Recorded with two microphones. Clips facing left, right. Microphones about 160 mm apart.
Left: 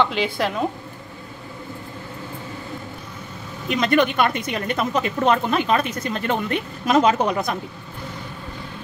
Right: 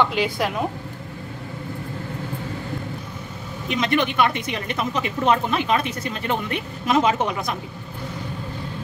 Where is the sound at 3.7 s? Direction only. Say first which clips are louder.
Left 3 dB; 45° left (ahead or behind).